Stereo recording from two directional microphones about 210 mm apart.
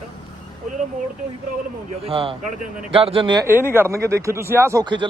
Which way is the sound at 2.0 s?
25° right (ahead or behind).